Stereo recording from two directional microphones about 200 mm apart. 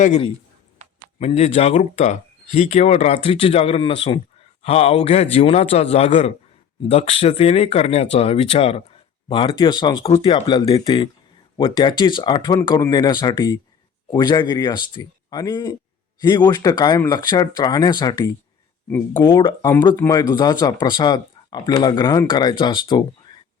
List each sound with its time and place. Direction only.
0.0 s speech: 35° left (ahead or behind)